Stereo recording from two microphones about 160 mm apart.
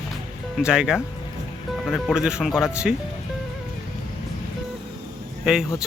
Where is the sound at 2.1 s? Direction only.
5° right (ahead or behind).